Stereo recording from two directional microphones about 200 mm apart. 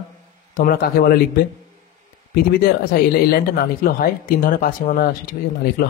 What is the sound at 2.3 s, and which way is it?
Speech, 50° left (ahead or behind).